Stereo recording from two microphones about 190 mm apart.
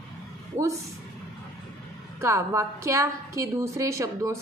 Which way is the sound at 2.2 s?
15° right (ahead or behind).